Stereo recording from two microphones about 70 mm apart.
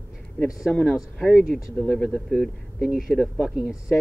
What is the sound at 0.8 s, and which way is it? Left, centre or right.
Speech, centre.